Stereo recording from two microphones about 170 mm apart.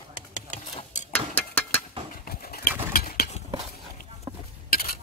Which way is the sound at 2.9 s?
60° left (ahead or behind).